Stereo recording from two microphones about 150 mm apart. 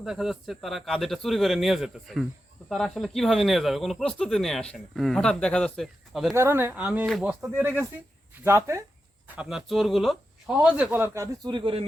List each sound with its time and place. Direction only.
0.0 s speech: 5° right (ahead or behind)
6.3 s speech: 15° right (ahead or behind)
11.4 s a man's voice: 35° right (ahead or behind)